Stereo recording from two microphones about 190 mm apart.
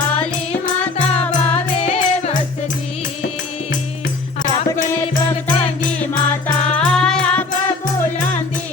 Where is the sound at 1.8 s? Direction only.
35° left (ahead or behind).